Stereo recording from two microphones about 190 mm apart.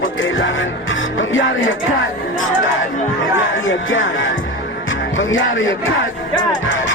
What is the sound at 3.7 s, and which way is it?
Music, 90° left.